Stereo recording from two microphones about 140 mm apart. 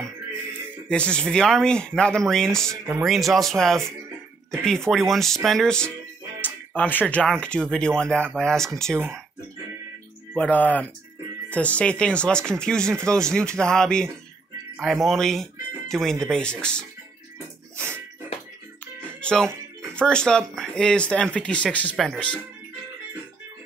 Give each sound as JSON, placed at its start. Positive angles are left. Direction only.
{"t": 0.8, "sound": "speech", "side_deg": 5}
{"t": 10.3, "sound": "speech", "side_deg": 10}
{"t": 17.7, "sound": "music", "side_deg": -15}
{"t": 19.2, "sound": "speech", "side_deg": 5}